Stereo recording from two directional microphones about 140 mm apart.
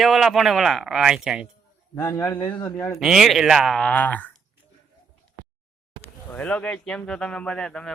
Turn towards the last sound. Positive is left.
turn(degrees=5)  # may be behind; listen again after turning